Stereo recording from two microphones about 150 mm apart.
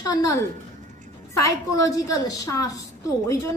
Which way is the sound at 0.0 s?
25° left (ahead or behind).